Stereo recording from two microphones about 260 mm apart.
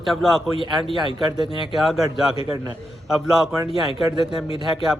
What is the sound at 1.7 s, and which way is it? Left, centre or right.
A man's voice, centre.